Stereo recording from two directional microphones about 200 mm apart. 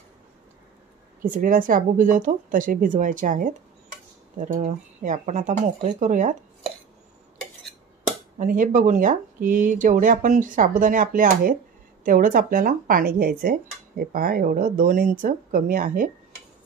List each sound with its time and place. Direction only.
1.2 s speech: 45° right (ahead or behind)
8.4 s speech: 40° right (ahead or behind)